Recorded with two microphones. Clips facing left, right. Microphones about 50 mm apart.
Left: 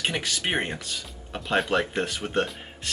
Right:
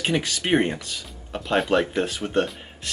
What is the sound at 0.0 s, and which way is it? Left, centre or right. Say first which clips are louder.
Speech: right 3 dB; centre.